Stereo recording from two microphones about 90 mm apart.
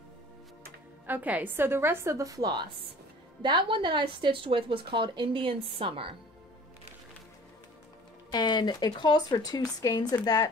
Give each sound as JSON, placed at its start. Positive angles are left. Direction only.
{"t": 1.0, "sound": "a woman's voice", "side_deg": -20}
{"t": 8.3, "sound": "speech", "side_deg": 55}